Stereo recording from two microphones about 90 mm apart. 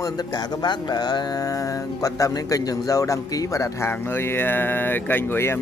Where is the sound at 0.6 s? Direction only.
50° left (ahead or behind).